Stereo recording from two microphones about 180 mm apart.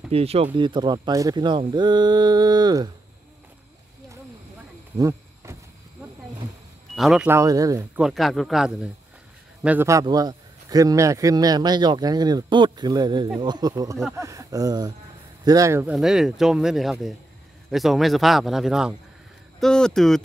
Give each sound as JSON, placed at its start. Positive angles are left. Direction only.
{"t": 0.1, "sound": "a man's voice", "side_deg": -35}
{"t": 4.9, "sound": "a sound", "side_deg": -15}
{"t": 7.0, "sound": "speech", "side_deg": 0}
{"t": 7.2, "sound": "a man's voice", "side_deg": -15}
{"t": 8.0, "sound": "a man's voice", "side_deg": 0}
{"t": 15.9, "sound": "speech", "side_deg": 0}